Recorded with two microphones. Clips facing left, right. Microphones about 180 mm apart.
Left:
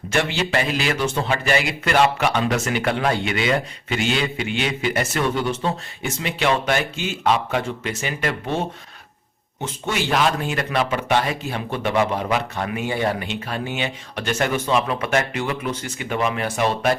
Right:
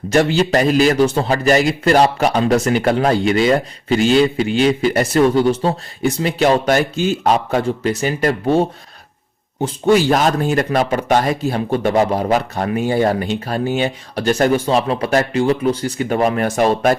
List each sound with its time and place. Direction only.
0.1 s a man's voice: 40° right (ahead or behind)